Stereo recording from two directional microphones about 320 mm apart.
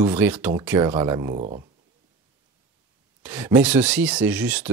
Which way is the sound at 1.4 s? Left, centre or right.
Right.